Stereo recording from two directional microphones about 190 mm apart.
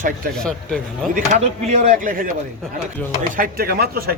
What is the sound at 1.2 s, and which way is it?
A man's voice, 40° right (ahead or behind).